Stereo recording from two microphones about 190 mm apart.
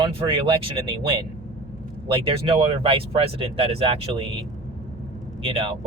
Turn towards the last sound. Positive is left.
turn(degrees=-30)  # may be behind; listen again after turning